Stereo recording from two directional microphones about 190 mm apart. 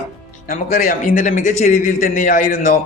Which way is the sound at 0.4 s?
45° left (ahead or behind).